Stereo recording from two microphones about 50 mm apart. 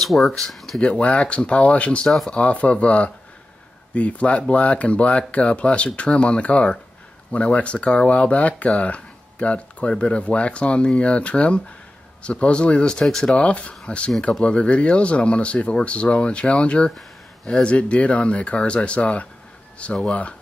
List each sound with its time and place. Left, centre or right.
0.0 s speech: centre
0.5 s a sound: centre
0.7 s speech: left
2.0 s speech: centre
2.3 s speech: left